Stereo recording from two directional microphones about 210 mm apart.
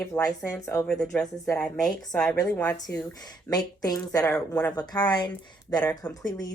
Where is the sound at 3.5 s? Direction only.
20° left (ahead or behind).